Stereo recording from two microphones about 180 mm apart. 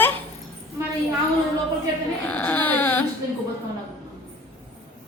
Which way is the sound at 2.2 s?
10° left (ahead or behind).